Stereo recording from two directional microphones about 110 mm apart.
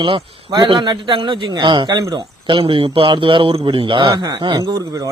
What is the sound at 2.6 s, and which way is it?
Speech, 55° right (ahead or behind).